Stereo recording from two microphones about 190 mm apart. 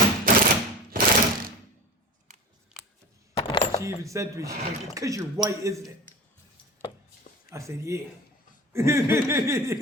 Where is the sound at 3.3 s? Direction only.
30° left (ahead or behind).